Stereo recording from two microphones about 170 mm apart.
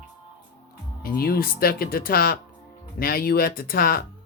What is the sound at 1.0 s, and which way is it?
Speech, 60° left (ahead or behind).